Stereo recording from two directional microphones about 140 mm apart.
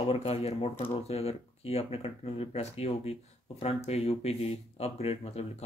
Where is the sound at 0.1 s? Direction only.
45° left (ahead or behind).